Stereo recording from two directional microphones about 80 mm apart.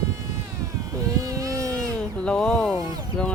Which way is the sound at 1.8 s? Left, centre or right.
Centre.